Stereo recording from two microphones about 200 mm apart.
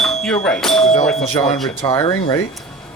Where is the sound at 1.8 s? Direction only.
25° left (ahead or behind).